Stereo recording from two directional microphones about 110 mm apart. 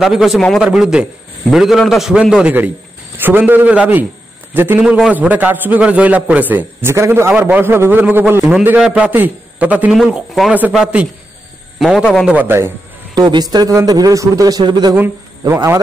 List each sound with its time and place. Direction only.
0.0 s a man's voice: centre (ahead or behind); by 4.8 s 20° right (ahead or behind)
4.8 s a man's voice: 5° right (ahead or behind)
13.1 s a man's voice: 40° right (ahead or behind)
15.4 s speech: 25° right (ahead or behind)